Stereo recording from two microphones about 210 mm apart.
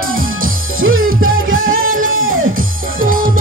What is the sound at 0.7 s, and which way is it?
Music, 75° right (ahead or behind).